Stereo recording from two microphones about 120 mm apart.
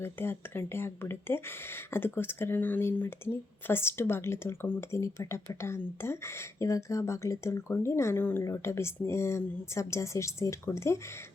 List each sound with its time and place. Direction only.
0.0 s speech: 20° left (ahead or behind)